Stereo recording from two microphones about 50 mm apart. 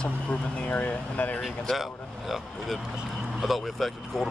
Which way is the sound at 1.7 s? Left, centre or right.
Centre.